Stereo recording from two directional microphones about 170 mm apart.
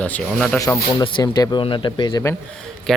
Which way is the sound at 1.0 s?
25° left (ahead or behind).